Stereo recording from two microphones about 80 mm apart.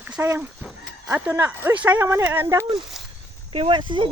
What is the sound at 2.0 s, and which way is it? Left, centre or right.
Speech, right.